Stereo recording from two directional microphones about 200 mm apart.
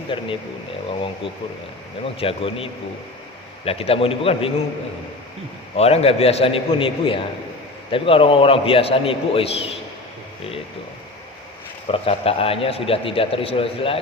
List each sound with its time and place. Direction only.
0.1 s a man's voice: 25° left (ahead or behind)
2.1 s a man's voice: 30° left (ahead or behind)
5.7 s a man's voice: 30° left (ahead or behind)
11.9 s a man's voice: 30° left (ahead or behind)